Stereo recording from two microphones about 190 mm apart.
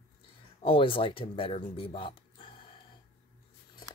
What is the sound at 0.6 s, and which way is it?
Speech, 30° left (ahead or behind).